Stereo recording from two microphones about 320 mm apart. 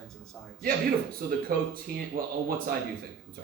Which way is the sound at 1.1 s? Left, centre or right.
Right.